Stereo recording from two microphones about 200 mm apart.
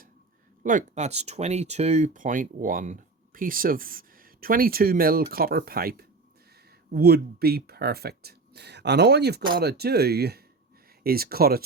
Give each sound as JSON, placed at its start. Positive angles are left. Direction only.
{"t": 0.6, "sound": "speech", "side_deg": -40}